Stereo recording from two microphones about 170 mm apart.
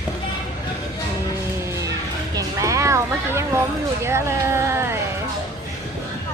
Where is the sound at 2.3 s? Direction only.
20° right (ahead or behind).